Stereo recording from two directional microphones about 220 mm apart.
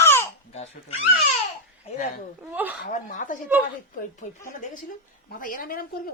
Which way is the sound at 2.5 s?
5° right (ahead or behind).